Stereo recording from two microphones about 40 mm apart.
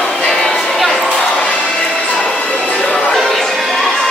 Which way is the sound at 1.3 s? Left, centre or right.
Left.